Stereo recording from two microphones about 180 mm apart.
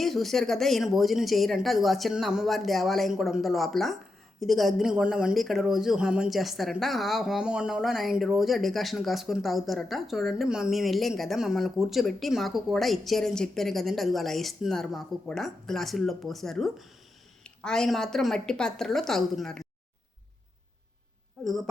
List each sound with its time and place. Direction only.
0.0 s speech: centre (ahead or behind)